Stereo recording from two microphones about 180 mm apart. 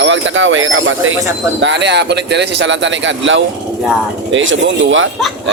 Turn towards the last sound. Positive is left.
turn(degrees=-90)